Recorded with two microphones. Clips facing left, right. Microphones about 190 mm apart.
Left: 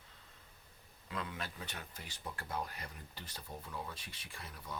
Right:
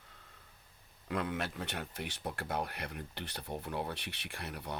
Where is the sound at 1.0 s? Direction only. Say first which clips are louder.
Right 7 dB; 65° right (ahead or behind).